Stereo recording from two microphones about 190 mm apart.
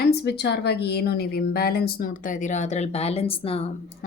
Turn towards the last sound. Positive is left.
turn(degrees=30)  # may be behind; listen again after turning